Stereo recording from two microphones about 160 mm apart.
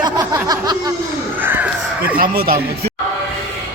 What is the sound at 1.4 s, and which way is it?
Caw, 10° right (ahead or behind).